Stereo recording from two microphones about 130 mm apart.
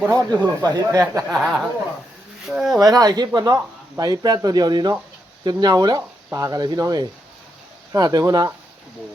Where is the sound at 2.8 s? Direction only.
30° right (ahead or behind).